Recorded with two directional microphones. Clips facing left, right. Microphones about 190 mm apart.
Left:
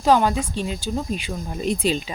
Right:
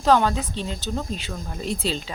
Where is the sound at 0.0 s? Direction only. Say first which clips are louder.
Left 1 dB; 10° left (ahead or behind).